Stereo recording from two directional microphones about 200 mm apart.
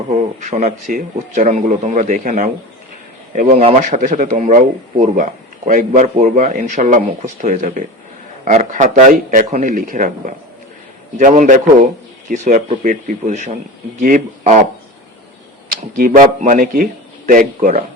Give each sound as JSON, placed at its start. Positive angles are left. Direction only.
{"t": 0.3, "sound": "speech", "side_deg": -35}
{"t": 15.7, "sound": "speech", "side_deg": -45}